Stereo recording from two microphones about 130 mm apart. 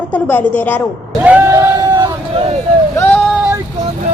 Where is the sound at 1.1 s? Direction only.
10° right (ahead or behind).